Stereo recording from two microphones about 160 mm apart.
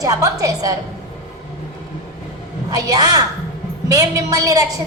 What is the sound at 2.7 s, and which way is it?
A woman's voice, 25° right (ahead or behind).